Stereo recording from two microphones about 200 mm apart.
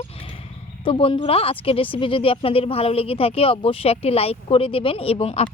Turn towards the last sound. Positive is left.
turn(degrees=30)  # may be behind; listen again after turning